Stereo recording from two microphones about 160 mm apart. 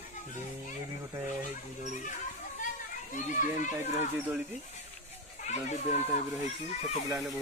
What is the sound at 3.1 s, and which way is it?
Speech, 50° left (ahead or behind).